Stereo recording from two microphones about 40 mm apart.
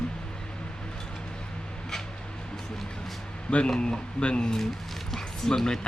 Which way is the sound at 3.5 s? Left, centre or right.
Left.